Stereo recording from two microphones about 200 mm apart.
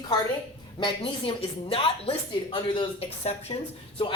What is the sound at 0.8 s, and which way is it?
A woman's voice, 25° left (ahead or behind).